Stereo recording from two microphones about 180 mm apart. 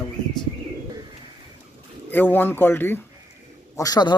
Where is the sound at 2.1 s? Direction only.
10° left (ahead or behind).